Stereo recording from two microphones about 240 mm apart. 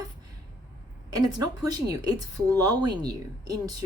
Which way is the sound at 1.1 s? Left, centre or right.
Centre.